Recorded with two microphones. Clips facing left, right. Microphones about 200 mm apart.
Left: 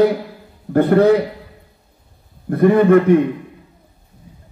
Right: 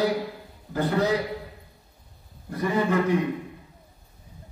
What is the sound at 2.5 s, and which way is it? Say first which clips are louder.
Speech: left 13 dB; 60° left (ahead or behind).